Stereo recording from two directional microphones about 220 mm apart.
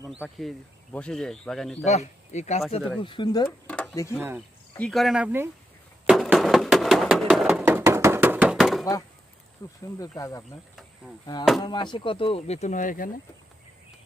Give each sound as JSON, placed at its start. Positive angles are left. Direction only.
{"t": 0.2, "sound": "a man's voice", "side_deg": 0}
{"t": 1.8, "sound": "speech", "side_deg": 30}
{"t": 3.0, "sound": "speech", "side_deg": 20}
{"t": 3.7, "sound": "a sound", "side_deg": 5}
{"t": 4.2, "sound": "speech", "side_deg": -10}
{"t": 4.8, "sound": "a man's voice", "side_deg": 0}
{"t": 6.1, "sound": "a sound", "side_deg": 0}
{"t": 8.8, "sound": "speech", "side_deg": 15}
{"t": 11.6, "sound": "speech", "side_deg": 20}